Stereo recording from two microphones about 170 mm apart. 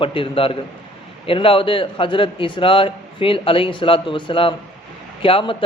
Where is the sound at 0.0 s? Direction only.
30° left (ahead or behind).